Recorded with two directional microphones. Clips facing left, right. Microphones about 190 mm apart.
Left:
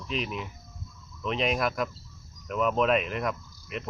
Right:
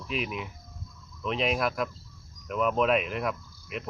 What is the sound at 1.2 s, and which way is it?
Cricket, centre (ahead or behind).